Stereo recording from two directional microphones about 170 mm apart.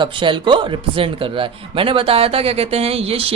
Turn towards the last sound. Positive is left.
turn(degrees=-35)  # may be behind; listen again after turning